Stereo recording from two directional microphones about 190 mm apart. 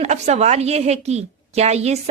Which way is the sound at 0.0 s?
35° right (ahead or behind).